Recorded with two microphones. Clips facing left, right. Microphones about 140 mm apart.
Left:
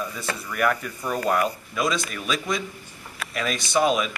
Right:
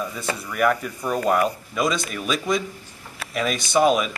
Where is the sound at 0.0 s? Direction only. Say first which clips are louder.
Right 2 dB; centre (ahead or behind).